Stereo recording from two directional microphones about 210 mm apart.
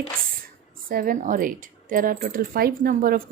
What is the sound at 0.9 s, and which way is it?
Speech, 45° right (ahead or behind).